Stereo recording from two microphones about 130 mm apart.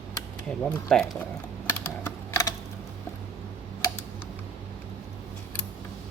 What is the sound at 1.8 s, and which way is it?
Typing, 25° left (ahead or behind).